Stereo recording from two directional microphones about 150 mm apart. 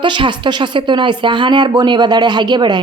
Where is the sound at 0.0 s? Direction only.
30° right (ahead or behind).